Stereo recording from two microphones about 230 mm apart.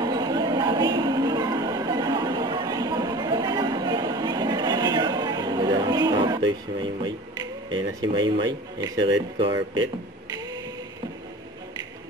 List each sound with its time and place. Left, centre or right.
0.0 s music: centre
6.8 s speech: centre